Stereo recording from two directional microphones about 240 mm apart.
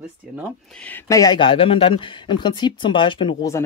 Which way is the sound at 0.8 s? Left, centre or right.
Centre.